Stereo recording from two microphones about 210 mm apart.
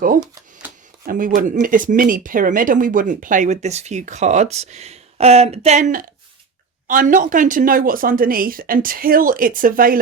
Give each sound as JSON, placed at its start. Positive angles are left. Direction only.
{"t": 1.0, "sound": "speech", "side_deg": -40}